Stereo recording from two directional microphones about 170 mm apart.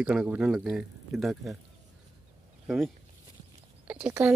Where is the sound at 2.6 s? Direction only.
5° right (ahead or behind).